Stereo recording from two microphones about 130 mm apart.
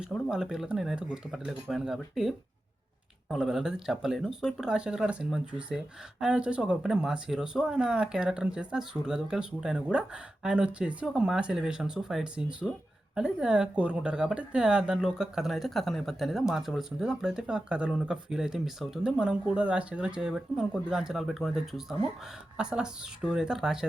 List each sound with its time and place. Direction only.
0.0 s speech: 5° right (ahead or behind)